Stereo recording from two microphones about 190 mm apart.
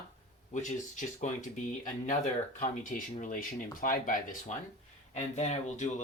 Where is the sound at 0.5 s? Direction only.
40° left (ahead or behind).